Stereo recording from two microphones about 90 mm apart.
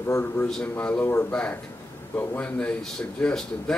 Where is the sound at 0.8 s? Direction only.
20° left (ahead or behind).